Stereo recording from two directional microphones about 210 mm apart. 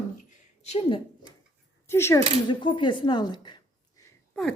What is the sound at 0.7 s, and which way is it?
Speech, 30° left (ahead or behind).